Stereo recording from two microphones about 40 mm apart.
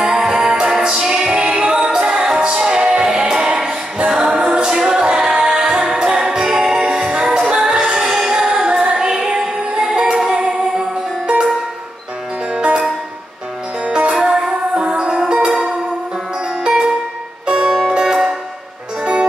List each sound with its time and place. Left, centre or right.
0.0 s music: centre
2.8 s a capella: right; by 4.4 s centre
4.4 s a capella: right
4.6 s music: centre
12.5 s music: right
13.8 s music: right